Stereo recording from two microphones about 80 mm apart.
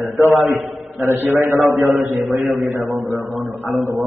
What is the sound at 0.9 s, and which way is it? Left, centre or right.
Speech, right.